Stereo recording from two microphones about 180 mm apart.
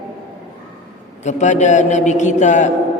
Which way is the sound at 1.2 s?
40° left (ahead or behind).